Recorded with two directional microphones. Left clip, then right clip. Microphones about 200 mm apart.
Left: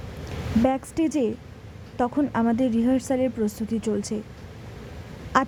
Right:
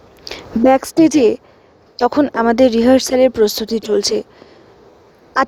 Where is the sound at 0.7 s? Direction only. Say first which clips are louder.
Right 14 dB; 35° right (ahead or behind).